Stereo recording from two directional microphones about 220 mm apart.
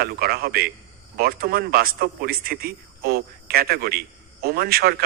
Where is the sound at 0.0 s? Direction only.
45° right (ahead or behind).